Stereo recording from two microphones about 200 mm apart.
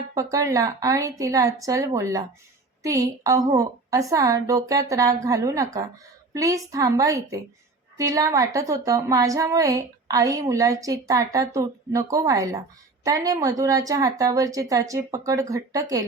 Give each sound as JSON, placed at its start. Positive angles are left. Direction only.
{"t": 0.1, "sound": "a woman's voice", "side_deg": -15}